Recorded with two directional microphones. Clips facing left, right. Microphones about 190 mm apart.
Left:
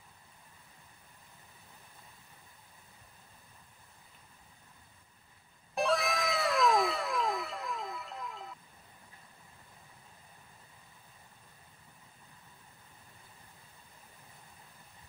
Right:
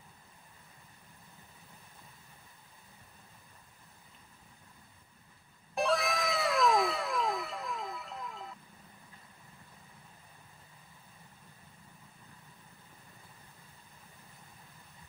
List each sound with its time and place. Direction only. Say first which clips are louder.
5.8 s cat: even; centre (ahead or behind)